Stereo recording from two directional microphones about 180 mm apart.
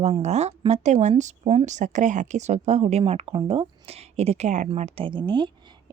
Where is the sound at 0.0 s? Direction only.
40° right (ahead or behind).